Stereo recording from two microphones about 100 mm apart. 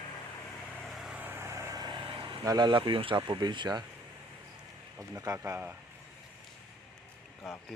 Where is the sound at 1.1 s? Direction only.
20° right (ahead or behind); by 2.4 s 50° right (ahead or behind).